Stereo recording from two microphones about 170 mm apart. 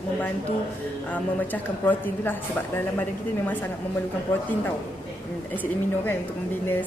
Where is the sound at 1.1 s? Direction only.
10° left (ahead or behind).